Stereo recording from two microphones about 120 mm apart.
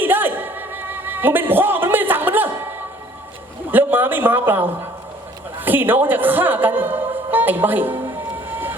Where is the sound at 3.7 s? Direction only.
15° right (ahead or behind).